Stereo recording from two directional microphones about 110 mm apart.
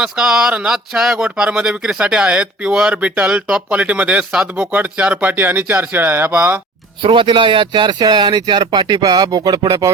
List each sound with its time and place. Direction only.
0.0 s speech: 5° right (ahead or behind)
7.0 s speech: 50° right (ahead or behind)